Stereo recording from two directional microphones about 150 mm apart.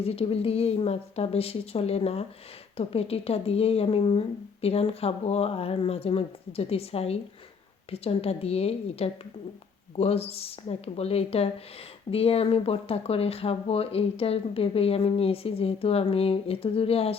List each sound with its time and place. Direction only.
0.0 s speech: 40° left (ahead or behind)